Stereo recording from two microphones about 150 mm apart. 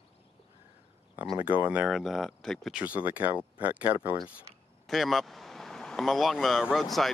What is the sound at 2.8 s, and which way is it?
Speech, 10° right (ahead or behind).